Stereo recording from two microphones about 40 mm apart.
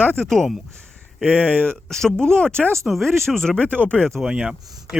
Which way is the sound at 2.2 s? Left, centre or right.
Centre.